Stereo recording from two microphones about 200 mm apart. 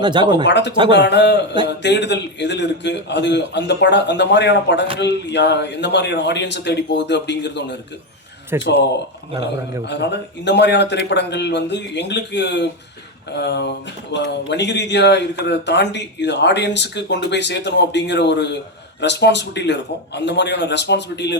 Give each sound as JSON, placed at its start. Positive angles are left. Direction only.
{"t": 0.0, "sound": "speech", "side_deg": -20}
{"t": 0.4, "sound": "speech", "side_deg": 60}
{"t": 8.5, "sound": "a man's voice", "side_deg": -10}
{"t": 9.8, "sound": "speech", "side_deg": 60}